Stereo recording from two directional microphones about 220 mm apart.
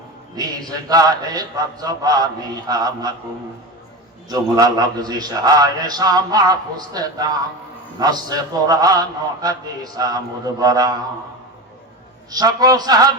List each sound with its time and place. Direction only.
0.3 s a man's voice: 15° right (ahead or behind)
4.3 s a man's voice: 15° right (ahead or behind)
12.3 s a man's voice: 15° right (ahead or behind)